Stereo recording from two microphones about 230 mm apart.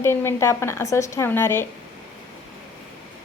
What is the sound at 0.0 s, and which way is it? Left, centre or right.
A woman's voice, centre.